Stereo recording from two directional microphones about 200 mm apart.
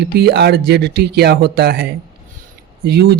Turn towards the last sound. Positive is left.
turn(degrees=-55)  # may be behind; listen again after turning